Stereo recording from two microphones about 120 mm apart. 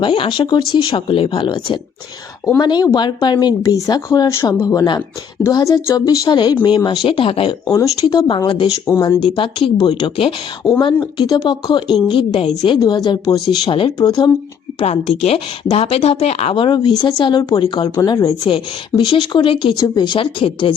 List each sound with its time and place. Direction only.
0.0 s speech: 45° left (ahead or behind)
7.7 s speech: 30° left (ahead or behind)
8.4 s speech: 45° left (ahead or behind)
10.6 s a woman's voice: centre (ahead or behind)
11.0 s speech: 35° left (ahead or behind); by 12.7 s 55° left (ahead or behind)
12.7 s speech: 40° left (ahead or behind)
14.0 s speech: 35° left (ahead or behind)
14.8 s speech: 60° left (ahead or behind); by 19.7 s 45° left (ahead or behind)
19.7 s speech: 25° left (ahead or behind)
20.1 s speech: 45° left (ahead or behind)